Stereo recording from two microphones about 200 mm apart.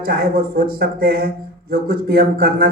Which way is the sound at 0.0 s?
50° right (ahead or behind).